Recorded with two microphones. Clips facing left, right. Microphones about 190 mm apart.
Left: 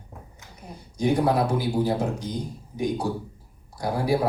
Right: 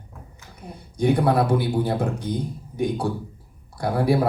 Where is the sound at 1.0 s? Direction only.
60° right (ahead or behind).